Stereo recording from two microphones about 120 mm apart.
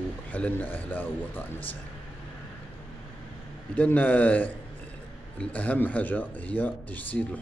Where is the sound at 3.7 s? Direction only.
15° left (ahead or behind).